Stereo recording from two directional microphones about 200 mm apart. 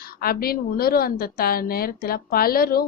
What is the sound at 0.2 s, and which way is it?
A woman's voice, 50° left (ahead or behind).